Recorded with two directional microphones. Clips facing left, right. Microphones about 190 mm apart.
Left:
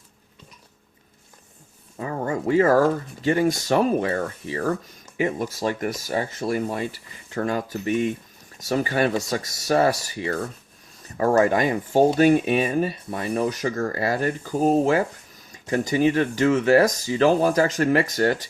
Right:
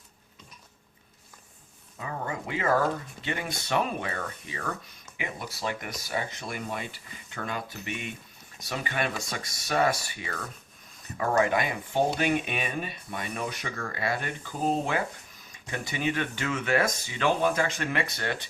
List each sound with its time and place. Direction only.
2.0 s speech: 40° left (ahead or behind)